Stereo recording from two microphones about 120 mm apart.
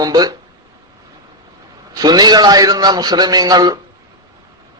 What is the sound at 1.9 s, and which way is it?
A man's voice, 35° right (ahead or behind).